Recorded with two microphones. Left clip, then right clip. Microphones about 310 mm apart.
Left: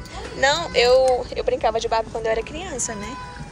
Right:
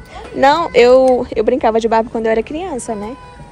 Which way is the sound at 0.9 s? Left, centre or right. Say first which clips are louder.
Right 7 dB; right.